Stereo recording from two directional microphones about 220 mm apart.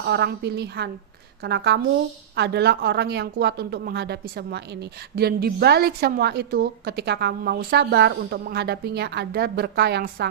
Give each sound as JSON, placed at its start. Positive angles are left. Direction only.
{"t": 0.1, "sound": "a woman's voice", "side_deg": -50}